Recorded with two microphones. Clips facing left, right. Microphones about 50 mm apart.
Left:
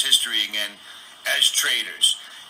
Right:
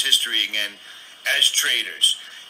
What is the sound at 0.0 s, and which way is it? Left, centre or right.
A man's voice, right.